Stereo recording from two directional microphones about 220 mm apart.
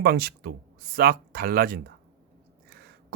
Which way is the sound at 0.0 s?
45° right (ahead or behind).